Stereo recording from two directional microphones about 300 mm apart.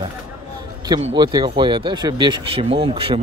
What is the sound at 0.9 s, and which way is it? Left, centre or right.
Speech, centre.